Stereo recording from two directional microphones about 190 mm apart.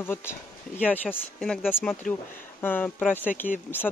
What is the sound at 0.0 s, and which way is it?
Speech, 10° left (ahead or behind).